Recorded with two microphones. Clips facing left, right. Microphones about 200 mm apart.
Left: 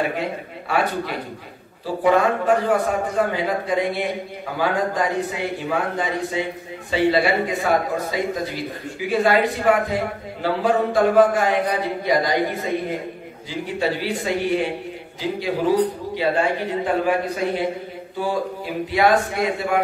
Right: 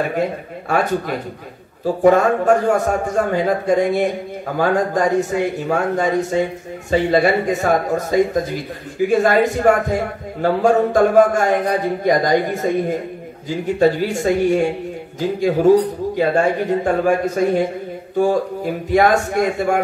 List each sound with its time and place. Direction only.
0.7 s a man's voice: 45° right (ahead or behind)